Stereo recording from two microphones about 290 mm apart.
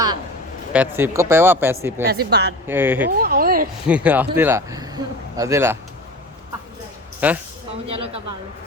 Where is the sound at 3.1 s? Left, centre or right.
Right.